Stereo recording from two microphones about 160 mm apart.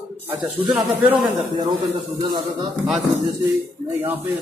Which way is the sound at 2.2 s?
30° right (ahead or behind).